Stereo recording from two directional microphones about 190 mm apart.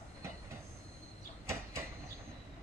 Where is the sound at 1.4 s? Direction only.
15° right (ahead or behind).